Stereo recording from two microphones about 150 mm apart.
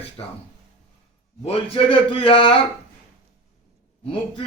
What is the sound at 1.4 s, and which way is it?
A man's voice, 40° left (ahead or behind).